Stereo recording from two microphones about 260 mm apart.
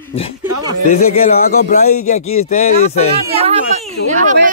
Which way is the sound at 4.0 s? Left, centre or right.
Left.